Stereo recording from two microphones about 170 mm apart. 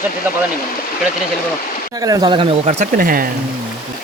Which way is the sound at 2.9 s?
55° right (ahead or behind).